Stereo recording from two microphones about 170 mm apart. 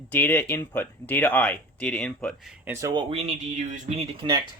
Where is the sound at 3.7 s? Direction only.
35° right (ahead or behind).